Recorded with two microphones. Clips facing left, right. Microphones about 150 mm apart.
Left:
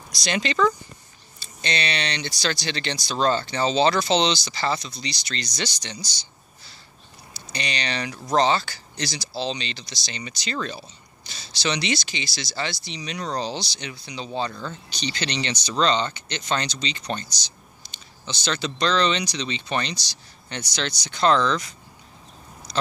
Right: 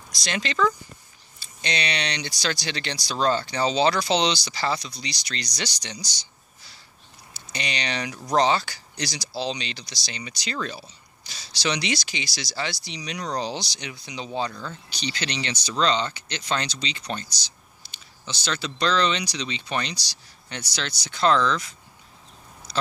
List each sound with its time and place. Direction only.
0.2 s speech: centre (ahead or behind)
1.4 s speech: 15° right (ahead or behind)
7.5 s speech: 15° right (ahead or behind)